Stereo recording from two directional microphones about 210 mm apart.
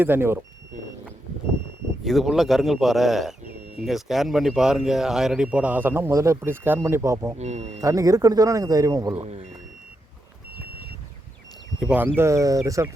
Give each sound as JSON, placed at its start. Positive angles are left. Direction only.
{"t": 0.0, "sound": "speech", "side_deg": -10}
{"t": 2.0, "sound": "speech", "side_deg": 0}
{"t": 7.3, "sound": "speech", "side_deg": -30}
{"t": 7.8, "sound": "speech", "side_deg": -15}
{"t": 9.2, "sound": "speech", "side_deg": -30}
{"t": 11.8, "sound": "speech", "side_deg": -5}